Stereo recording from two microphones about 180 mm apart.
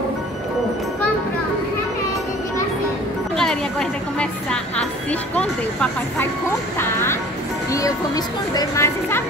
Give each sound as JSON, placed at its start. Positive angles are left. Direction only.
{"t": 4.2, "sound": "music", "side_deg": 5}
{"t": 5.3, "sound": "speech", "side_deg": 5}
{"t": 6.8, "sound": "vehicle", "side_deg": 15}
{"t": 8.5, "sound": "speech", "side_deg": 15}